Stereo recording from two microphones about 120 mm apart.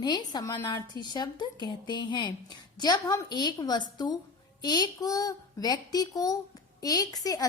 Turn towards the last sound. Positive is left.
turn(degrees=30)  # may be behind; listen again after turning